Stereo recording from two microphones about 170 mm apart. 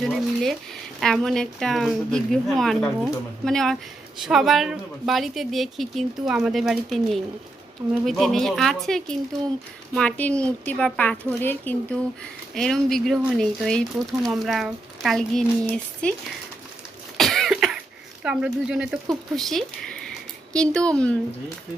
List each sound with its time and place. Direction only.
0.0 s a woman's voice: centre (ahead or behind)
17.2 s cough: centre (ahead or behind)
18.2 s speech: 5° right (ahead or behind)